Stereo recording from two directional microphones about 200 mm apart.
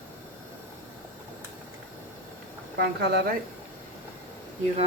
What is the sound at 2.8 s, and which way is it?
Speech, 55° right (ahead or behind).